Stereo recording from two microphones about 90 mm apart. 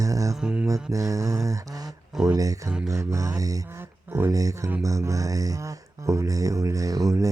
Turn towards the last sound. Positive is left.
turn(degrees=-40)  # may be behind; listen again after turning